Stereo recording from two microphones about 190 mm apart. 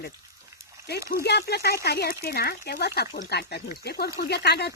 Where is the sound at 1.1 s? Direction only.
60° left (ahead or behind).